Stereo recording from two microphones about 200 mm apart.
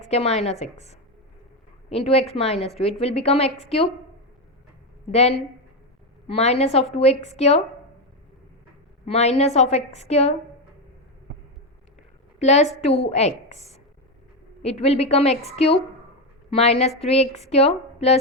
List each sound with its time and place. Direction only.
0.0 s a woman's voice: 30° left (ahead or behind)
5.1 s a woman's voice: 30° left (ahead or behind)
9.0 s a woman's voice: 30° left (ahead or behind)
12.4 s a woman's voice: 35° left (ahead or behind)